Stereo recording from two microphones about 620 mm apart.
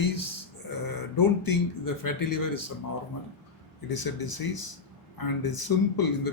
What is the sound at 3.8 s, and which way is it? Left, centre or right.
A man's voice, left.